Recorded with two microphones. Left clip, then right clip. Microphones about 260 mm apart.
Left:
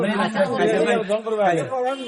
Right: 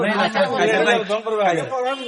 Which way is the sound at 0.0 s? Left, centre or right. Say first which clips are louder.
Right 3 dB; right.